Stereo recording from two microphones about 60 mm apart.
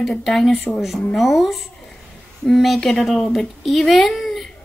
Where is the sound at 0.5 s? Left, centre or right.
Left.